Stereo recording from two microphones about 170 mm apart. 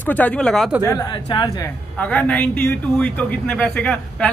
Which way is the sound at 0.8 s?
25° left (ahead or behind).